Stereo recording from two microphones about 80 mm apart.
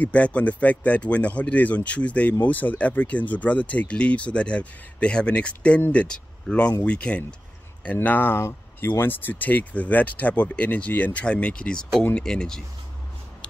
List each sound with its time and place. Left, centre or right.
0.0 s speech: centre